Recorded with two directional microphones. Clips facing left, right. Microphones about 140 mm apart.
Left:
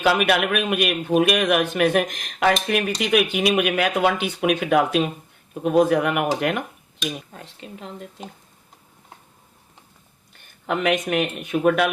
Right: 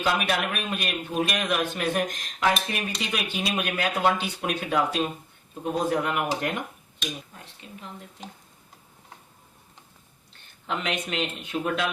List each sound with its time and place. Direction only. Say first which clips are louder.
0.0 s speech: left 6 dB; 75° left (ahead or behind)
5.6 s speech: left 8 dB; 80° left
10.7 s speech: left 8 dB; 60° left (ahead or behind)